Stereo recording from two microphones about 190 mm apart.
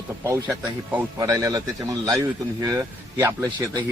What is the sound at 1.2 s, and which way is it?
A man's voice, 15° right (ahead or behind).